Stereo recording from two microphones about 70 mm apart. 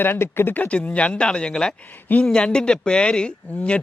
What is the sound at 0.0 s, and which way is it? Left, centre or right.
A man's voice, left.